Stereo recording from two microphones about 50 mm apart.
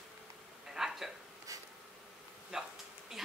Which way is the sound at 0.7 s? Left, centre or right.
Centre.